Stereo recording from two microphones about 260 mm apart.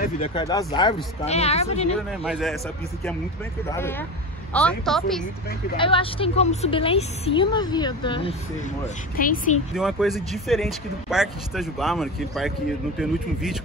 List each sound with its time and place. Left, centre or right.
0.0 s a woman's voice: left
2.0 s speech: centre
4.6 s speech: centre
5.8 s a woman's voice: centre
8.8 s a woman's voice: left
9.8 s speech: centre